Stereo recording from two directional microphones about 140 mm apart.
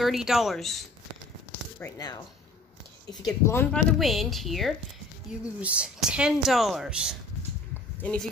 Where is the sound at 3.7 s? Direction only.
Centre (ahead or behind).